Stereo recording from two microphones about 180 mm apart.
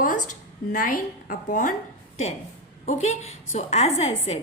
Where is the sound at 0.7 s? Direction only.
50° left (ahead or behind).